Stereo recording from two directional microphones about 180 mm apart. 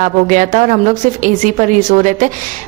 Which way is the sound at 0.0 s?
45° right (ahead or behind).